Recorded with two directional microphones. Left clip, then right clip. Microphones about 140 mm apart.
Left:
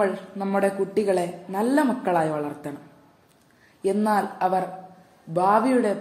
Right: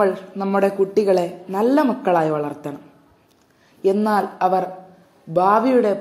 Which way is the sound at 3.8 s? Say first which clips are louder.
Right 4 dB; 15° right (ahead or behind).